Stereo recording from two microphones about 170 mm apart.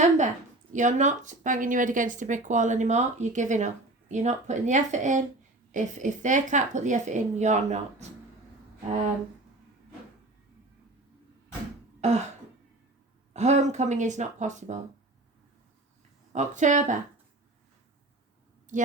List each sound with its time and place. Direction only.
0.7 s speech: 45° right (ahead or behind)
11.9 s throat clearing: 40° right (ahead or behind)
13.3 s speech: 40° right (ahead or behind)
16.3 s speech: 45° right (ahead or behind)
18.7 s speech: 50° right (ahead or behind)